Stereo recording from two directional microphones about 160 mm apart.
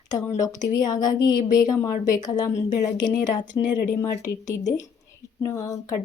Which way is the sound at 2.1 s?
25° left (ahead or behind).